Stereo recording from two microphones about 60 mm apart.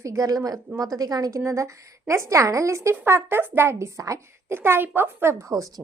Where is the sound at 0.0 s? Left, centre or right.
Right.